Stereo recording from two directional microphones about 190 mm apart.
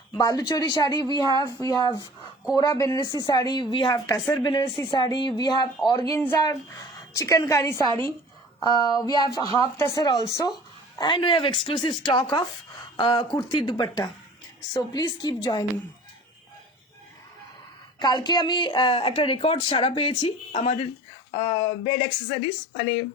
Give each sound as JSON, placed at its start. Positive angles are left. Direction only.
{"t": 0.1, "sound": "speech", "side_deg": 20}
{"t": 6.0, "sound": "a woman's voice", "side_deg": 15}
{"t": 18.0, "sound": "speech", "side_deg": 25}